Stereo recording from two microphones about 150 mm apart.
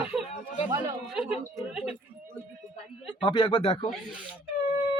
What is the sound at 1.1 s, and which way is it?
Speech, 5° right (ahead or behind).